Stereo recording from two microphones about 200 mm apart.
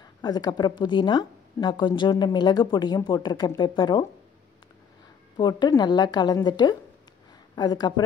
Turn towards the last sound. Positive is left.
turn(degrees=20)  # may be behind; listen again after turning